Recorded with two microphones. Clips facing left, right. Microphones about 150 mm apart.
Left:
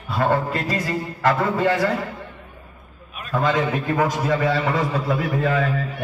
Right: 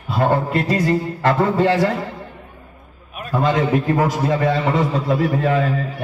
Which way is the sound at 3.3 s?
25° right (ahead or behind).